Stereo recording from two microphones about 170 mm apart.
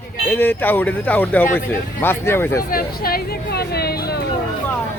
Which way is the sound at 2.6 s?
60° left (ahead or behind).